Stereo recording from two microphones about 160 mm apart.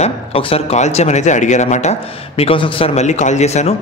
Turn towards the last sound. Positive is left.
turn(degrees=45)  # may be behind; listen again after turning